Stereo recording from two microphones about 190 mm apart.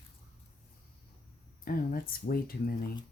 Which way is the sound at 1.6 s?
50° left (ahead or behind).